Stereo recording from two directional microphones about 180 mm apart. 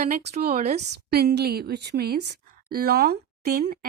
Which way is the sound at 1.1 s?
65° right (ahead or behind).